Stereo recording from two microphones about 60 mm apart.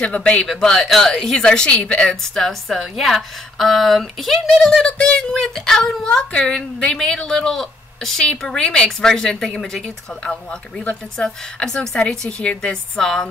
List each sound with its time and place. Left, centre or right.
0.0 s speech: centre
0.5 s speech: centre
2.3 s a woman's voice: centre